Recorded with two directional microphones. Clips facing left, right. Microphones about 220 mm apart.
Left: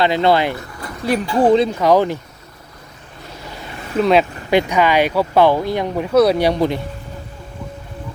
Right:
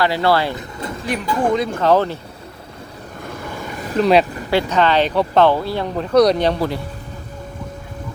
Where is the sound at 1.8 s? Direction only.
15° left (ahead or behind).